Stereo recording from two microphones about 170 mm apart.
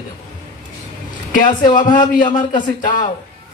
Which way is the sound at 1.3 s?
50° left (ahead or behind).